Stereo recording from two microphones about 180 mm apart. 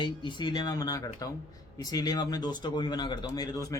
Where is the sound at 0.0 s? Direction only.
25° left (ahead or behind).